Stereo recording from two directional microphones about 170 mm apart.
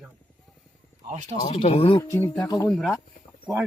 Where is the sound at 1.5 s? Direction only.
35° left (ahead or behind).